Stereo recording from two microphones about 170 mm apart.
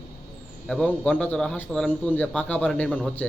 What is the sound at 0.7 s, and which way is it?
A man's voice, 5° left (ahead or behind).